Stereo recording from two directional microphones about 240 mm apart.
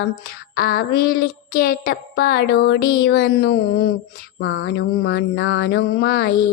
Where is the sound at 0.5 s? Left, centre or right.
Left.